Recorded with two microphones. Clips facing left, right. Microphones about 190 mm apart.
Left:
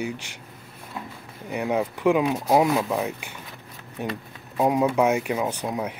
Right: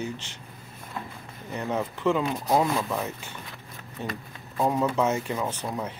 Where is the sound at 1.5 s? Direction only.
10° left (ahead or behind).